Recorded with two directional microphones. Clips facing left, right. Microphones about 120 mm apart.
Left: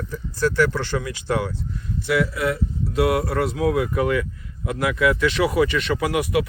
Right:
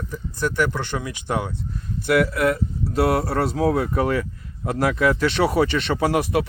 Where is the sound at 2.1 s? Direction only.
55° right (ahead or behind); by 6.4 s 30° right (ahead or behind).